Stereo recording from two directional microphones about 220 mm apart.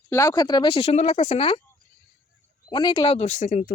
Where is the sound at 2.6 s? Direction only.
20° left (ahead or behind).